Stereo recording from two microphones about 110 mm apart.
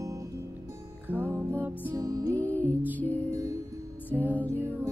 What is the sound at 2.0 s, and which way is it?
Music, 35° right (ahead or behind).